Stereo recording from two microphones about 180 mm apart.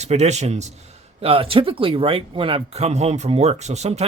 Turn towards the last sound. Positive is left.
turn(degrees=-35)  # may be behind; listen again after turning